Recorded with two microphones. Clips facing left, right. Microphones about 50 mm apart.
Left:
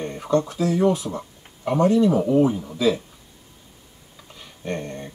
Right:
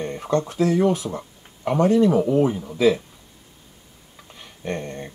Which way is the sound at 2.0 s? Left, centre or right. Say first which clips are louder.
Even; centre.